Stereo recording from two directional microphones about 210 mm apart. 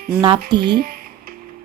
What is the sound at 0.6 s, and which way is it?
Music, 50° right (ahead or behind).